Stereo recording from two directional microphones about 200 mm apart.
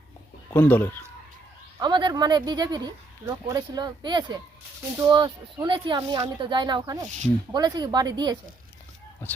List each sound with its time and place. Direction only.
0.5 s speech: 10° left (ahead or behind)
1.8 s speech: 20° right (ahead or behind)
9.2 s speech: 10° left (ahead or behind)